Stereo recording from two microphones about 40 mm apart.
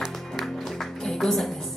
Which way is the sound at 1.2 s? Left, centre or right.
Centre.